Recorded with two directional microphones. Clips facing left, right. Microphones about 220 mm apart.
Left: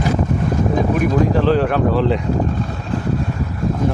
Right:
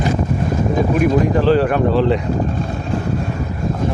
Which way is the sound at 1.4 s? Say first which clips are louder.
Right 1 dB; centre (ahead or behind).